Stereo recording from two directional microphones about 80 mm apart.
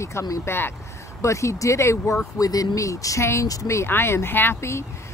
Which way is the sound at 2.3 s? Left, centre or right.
Left.